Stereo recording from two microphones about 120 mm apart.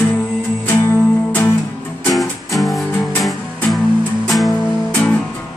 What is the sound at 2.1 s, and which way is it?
Music, centre (ahead or behind).